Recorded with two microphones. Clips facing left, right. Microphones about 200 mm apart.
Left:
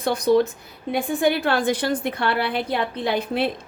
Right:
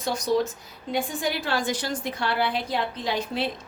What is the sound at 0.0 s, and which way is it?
A woman's voice, 60° left (ahead or behind).